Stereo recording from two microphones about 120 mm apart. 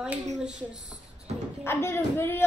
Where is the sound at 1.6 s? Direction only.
20° left (ahead or behind).